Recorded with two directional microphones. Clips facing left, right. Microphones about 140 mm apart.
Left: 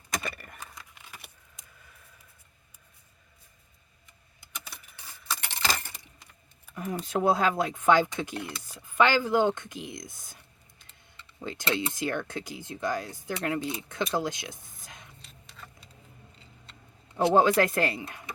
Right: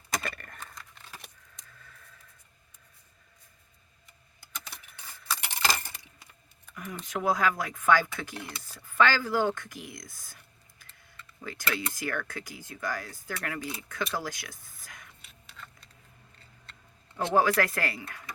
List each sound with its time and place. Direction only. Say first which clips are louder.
0.2 s keys jangling: even; 5° left (ahead or behind)
4.7 s keys jangling: even; centre (ahead or behind)
5.4 s a sound: right 1 dB; 10° right (ahead or behind)
7.0 s speech: left 3 dB; 30° left (ahead or behind)
15.2 s a sound: left 1 dB; 5° right (ahead or behind)
17.3 s speech: left 2 dB; 25° left (ahead or behind)